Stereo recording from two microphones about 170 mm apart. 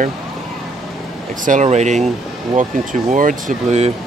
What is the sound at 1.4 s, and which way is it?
Speech, 45° right (ahead or behind).